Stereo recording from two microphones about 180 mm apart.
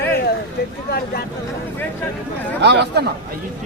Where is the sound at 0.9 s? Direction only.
60° left (ahead or behind).